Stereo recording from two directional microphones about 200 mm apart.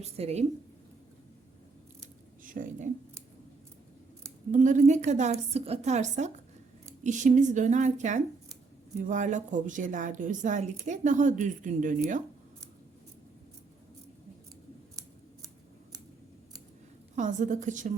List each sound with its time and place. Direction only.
0.0 s a woman's voice: 30° right (ahead or behind)
2.4 s speech: 40° right (ahead or behind)
4.5 s a woman's voice: 40° right (ahead or behind)
17.2 s a woman's voice: 40° right (ahead or behind)